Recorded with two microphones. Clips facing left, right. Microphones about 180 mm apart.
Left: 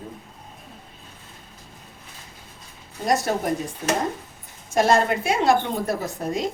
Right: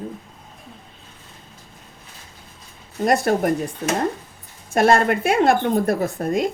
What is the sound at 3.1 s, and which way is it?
Speech, 55° right (ahead or behind).